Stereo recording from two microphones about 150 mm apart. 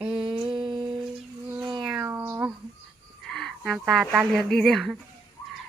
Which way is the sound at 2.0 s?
15° right (ahead or behind).